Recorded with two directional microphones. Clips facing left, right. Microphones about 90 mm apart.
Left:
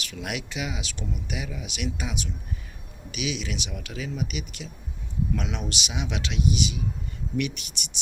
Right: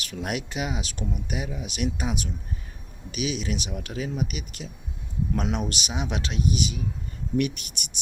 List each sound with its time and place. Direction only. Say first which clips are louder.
0.0 s speech: right 3 dB; 40° right (ahead or behind)